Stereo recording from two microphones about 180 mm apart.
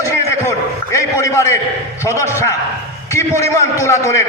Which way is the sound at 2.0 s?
15° left (ahead or behind).